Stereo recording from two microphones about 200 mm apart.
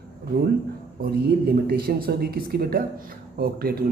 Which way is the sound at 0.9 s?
45° right (ahead or behind).